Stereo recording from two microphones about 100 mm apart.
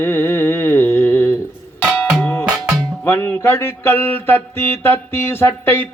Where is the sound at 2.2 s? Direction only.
15° left (ahead or behind).